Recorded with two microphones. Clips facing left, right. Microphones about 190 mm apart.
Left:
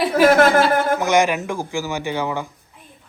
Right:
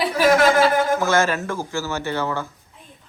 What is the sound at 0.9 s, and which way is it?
Speech, 15° left (ahead or behind).